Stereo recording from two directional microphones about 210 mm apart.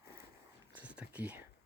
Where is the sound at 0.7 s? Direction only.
5° right (ahead or behind).